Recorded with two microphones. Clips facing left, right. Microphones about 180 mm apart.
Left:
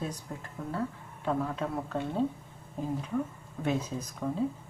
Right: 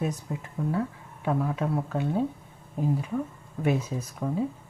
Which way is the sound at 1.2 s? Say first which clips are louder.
Right 4 dB; 10° right (ahead or behind).